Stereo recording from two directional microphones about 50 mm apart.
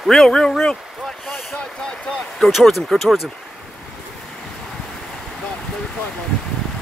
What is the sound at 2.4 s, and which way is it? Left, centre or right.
Speech, centre.